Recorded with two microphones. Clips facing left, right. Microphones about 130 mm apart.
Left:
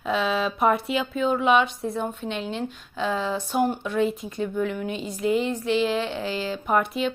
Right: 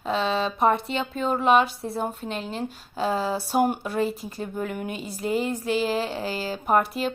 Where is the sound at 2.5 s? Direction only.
40° right (ahead or behind).